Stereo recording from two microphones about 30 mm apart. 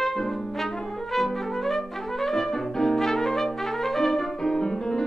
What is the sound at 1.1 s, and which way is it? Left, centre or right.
Brass instrument, centre.